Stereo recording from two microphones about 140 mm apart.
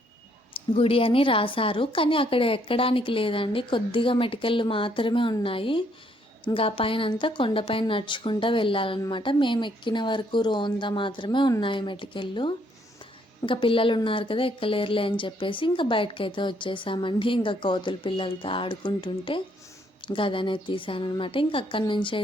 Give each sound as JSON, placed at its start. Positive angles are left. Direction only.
{"t": 0.8, "sound": "a woman's voice", "side_deg": 40}